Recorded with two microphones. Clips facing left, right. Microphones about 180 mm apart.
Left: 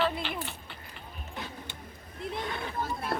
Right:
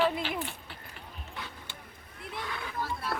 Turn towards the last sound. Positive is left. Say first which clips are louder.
# left 2 dB
turn(degrees=20)  # may be behind; listen again after turning